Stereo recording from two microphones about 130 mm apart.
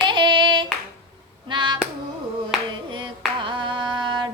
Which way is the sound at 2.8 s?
35° right (ahead or behind).